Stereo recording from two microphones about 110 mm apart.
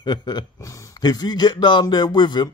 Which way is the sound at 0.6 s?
30° left (ahead or behind).